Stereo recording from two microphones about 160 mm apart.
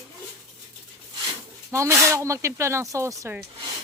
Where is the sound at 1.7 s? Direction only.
20° right (ahead or behind).